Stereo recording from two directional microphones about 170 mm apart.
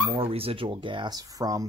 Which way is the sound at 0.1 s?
35° right (ahead or behind).